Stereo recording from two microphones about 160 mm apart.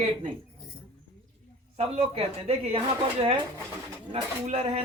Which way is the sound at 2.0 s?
40° right (ahead or behind).